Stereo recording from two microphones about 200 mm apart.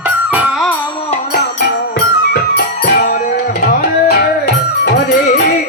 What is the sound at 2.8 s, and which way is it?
Music, 50° left (ahead or behind).